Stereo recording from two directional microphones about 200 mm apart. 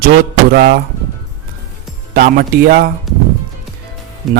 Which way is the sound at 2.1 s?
45° right (ahead or behind).